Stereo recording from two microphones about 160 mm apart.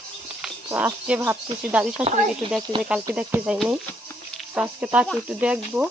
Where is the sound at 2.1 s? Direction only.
45° right (ahead or behind).